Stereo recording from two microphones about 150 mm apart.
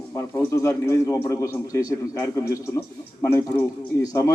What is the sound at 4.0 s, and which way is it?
Speech, 25° left (ahead or behind).